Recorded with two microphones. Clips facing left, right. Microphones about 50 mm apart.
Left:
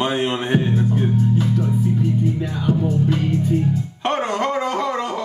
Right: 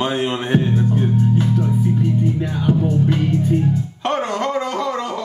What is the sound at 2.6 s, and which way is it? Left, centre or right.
Music, right.